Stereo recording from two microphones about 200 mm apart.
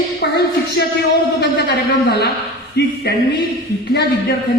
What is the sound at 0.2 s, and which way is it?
A man's voice, 55° left (ahead or behind).